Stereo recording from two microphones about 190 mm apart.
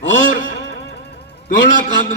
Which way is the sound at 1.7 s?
45° left (ahead or behind).